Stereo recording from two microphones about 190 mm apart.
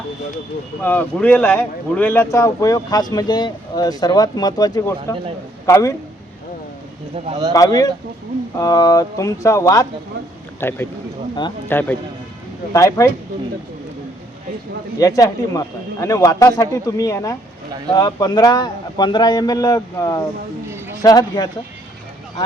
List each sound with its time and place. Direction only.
0.8 s speech: 10° left (ahead or behind)
7.3 s speech: 20° right (ahead or behind)
7.5 s speech: 20° left (ahead or behind)
14.9 s speech: 20° left (ahead or behind)
20.7 s a sound: 15° right (ahead or behind)
21.0 s speech: 20° left (ahead or behind)